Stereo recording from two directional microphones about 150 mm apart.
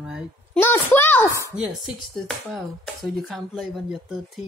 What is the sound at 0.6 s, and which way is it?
Speech, 15° left (ahead or behind).